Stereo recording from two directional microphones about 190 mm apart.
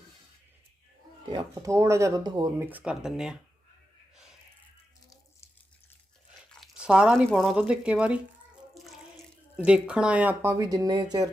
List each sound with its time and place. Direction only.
1.3 s speech: 20° right (ahead or behind); by 3.3 s 5° right (ahead or behind)
6.5 s speech: centre (ahead or behind)
8.7 s bathtub: centre (ahead or behind)
9.6 s speech: 5° right (ahead or behind)
10.6 s speech: 20° right (ahead or behind)